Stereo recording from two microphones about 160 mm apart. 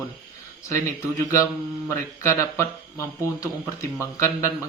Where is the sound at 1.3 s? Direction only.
20° left (ahead or behind).